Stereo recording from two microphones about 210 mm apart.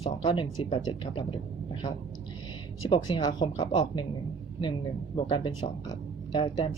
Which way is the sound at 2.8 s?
20° left (ahead or behind).